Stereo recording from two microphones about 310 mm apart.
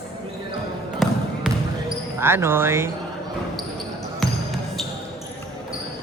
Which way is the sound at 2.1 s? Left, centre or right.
Centre.